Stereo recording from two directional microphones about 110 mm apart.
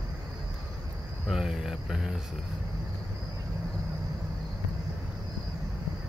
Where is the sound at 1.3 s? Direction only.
5° right (ahead or behind).